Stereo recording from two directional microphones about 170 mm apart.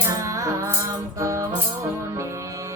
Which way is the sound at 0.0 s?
20° right (ahead or behind).